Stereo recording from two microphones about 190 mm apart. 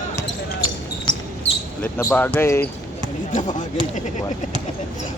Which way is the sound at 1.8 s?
10° left (ahead or behind).